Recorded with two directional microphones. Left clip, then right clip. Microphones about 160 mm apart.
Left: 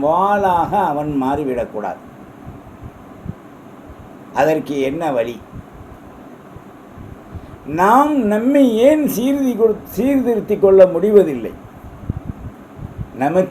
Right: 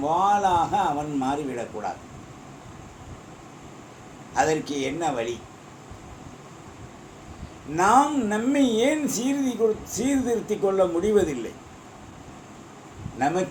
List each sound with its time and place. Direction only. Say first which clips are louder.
0.0 s a man's voice: left 6 dB; 55° left (ahead or behind)
4.4 s a man's voice: left 8 dB; 55° left (ahead or behind)
7.8 s a man's voice: left 7 dB; 60° left (ahead or behind)
13.1 s speech: left 8 dB; 55° left (ahead or behind)